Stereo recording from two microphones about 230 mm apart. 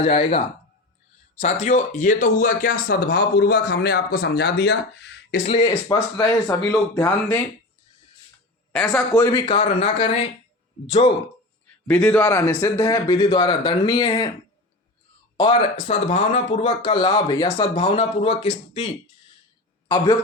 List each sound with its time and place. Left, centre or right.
0.0 s speech: left
5.5 s speech: left
5.9 s speech: centre
8.7 s speech: centre
9.5 s speech: left
11.9 s speech: centre
15.4 s speech: left